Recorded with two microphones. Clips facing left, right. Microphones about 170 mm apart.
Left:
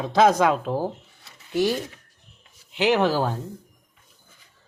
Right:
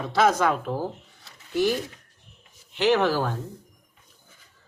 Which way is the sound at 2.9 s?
15° left (ahead or behind).